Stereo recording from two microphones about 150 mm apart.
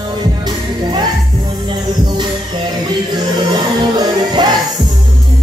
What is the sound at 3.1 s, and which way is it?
Music, 30° right (ahead or behind).